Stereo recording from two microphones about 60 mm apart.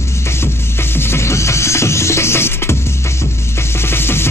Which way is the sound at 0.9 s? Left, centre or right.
Left.